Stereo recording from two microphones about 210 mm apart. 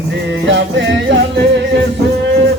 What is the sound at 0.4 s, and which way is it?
Music, 60° right (ahead or behind).